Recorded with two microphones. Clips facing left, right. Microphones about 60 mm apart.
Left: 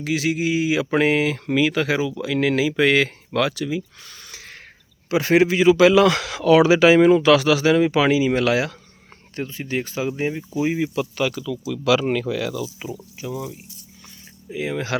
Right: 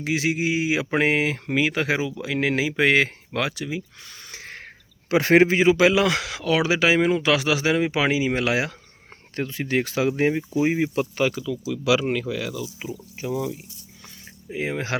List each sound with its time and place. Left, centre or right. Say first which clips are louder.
0.0 s speech: left 2 dB; right
4.3 s crow: right 4 dB; right
5.0 s a man's voice: even; right
5.6 s speech: left 4 dB; centre
9.3 s speech: right 2 dB; right
11.2 s speech: even; right
11.7 s speech: left 2 dB; centre
12.0 s speech: left 3 dB; centre
13.1 s speech: right 5 dB; right
14.5 s speech: left 1 dB; right